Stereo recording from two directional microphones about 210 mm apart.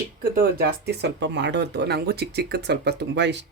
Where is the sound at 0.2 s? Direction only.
45° right (ahead or behind).